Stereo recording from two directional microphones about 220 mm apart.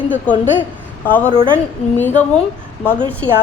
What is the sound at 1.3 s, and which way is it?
Speech, 25° right (ahead or behind).